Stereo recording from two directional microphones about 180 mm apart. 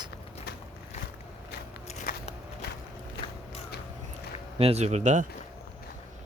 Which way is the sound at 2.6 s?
60° left (ahead or behind).